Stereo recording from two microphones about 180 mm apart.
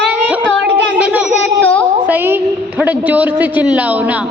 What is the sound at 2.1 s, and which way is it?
A woman's voice, 10° right (ahead or behind).